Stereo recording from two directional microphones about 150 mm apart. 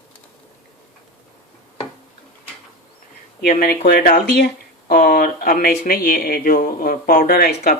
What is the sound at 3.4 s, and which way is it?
Speech, 80° left.